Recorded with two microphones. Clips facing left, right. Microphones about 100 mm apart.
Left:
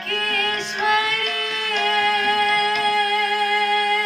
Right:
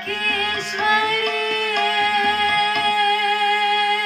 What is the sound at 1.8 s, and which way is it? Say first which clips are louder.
Music: even; 15° left (ahead or behind).